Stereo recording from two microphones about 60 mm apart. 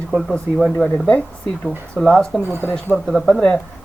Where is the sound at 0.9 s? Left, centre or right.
Left.